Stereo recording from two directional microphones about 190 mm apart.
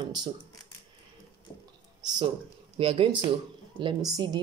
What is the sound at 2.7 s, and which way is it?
Speech, 30° right (ahead or behind).